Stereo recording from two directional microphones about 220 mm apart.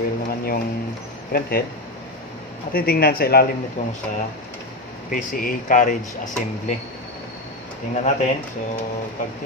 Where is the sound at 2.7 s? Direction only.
45° left (ahead or behind).